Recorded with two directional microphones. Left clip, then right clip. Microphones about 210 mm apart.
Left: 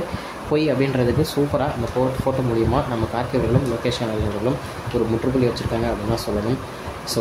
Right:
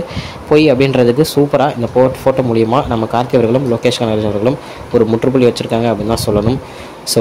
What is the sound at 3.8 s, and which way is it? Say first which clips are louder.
Speech: right 10 dB; 35° right (ahead or behind).